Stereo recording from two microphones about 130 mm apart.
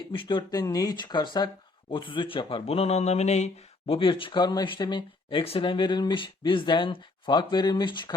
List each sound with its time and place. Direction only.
0.1 s speech: 40° left (ahead or behind)